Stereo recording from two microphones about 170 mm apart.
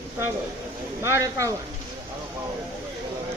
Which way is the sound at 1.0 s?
15° right (ahead or behind).